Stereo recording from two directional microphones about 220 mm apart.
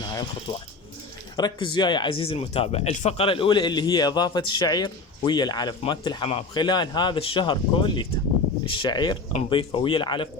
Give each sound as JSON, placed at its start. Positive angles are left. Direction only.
{"t": 0.1, "sound": "speech", "side_deg": 20}